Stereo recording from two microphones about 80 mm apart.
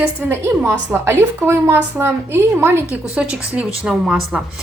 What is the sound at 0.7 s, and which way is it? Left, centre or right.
A woman's voice, right.